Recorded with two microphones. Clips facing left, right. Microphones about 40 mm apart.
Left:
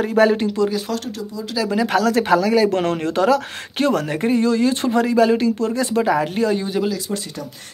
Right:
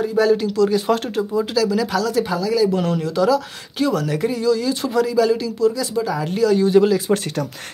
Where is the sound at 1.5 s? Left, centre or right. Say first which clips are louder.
Left 1 dB; left.